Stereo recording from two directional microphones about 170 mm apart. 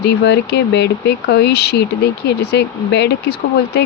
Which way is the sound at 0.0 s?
80° left.